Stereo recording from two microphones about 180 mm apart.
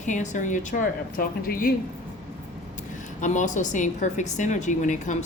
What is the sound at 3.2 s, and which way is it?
A woman's voice, 45° left (ahead or behind).